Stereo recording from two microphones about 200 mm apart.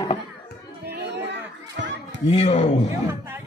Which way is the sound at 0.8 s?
55° right (ahead or behind).